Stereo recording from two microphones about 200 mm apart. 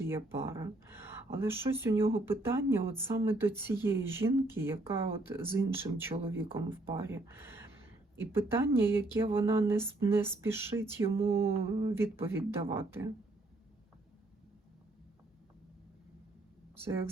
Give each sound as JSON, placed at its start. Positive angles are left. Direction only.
{"t": 0.0, "sound": "speech", "side_deg": -10}
{"t": 8.9, "sound": "speech", "side_deg": -10}
{"t": 11.2, "sound": "mantra", "side_deg": -30}
{"t": 11.4, "sound": "speech", "side_deg": -15}